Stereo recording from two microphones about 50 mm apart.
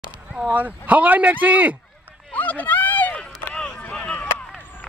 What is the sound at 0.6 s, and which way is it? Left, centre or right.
Speech, right.